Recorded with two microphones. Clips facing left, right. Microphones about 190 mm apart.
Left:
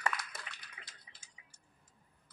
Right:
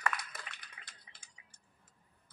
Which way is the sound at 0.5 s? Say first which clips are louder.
Left 1 dB; 60° right (ahead or behind).